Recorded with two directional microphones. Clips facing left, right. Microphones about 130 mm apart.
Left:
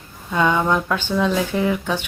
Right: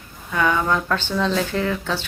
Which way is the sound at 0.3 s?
20° left (ahead or behind).